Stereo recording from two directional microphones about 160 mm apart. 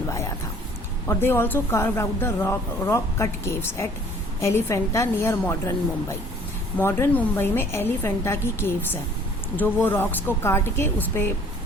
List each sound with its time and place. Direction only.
1.0 s speech: 15° left (ahead or behind)